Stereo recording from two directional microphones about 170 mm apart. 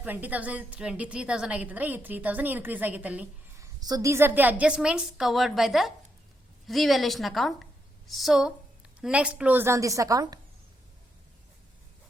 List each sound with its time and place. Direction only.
0.0 s a woman's voice: 10° right (ahead or behind)